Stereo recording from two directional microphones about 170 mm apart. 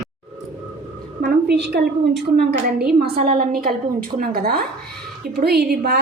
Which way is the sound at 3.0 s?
60° right (ahead or behind).